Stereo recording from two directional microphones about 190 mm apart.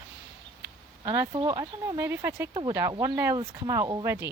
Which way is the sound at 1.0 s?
20° right (ahead or behind).